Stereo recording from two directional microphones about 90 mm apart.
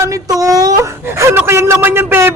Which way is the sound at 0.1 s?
40° right (ahead or behind).